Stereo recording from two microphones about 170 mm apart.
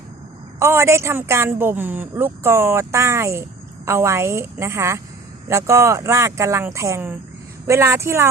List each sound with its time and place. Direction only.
0.6 s a woman's voice: 15° right (ahead or behind)